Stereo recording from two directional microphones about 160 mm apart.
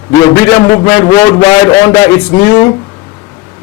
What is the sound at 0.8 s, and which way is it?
Speech, 15° left (ahead or behind).